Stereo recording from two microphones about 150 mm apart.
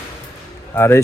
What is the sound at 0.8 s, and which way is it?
Speech, 15° left (ahead or behind).